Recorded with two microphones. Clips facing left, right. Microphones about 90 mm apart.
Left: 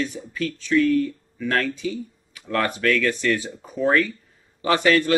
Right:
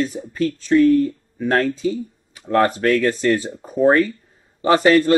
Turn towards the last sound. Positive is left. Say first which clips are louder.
# right 5 dB
turn(degrees=-30)  # may be behind; listen again after turning